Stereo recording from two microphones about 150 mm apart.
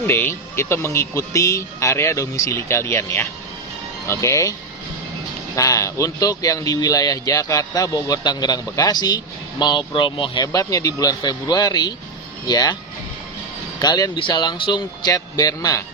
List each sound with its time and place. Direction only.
0.0 s speech: 15° left (ahead or behind)
5.5 s speech: 20° left (ahead or behind)
10.4 s speech: 20° left (ahead or behind)
13.8 s speech: 25° left (ahead or behind)